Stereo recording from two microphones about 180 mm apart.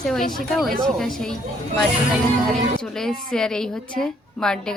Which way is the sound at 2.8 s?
5° left (ahead or behind).